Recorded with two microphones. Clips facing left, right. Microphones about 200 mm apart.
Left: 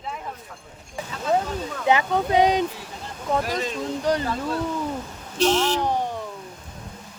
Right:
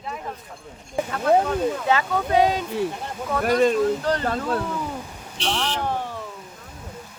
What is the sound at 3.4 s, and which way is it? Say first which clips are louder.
Speech: right 9 dB; 55° right (ahead or behind).